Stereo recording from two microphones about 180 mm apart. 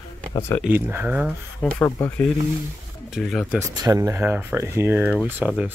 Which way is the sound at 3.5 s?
15° right (ahead or behind).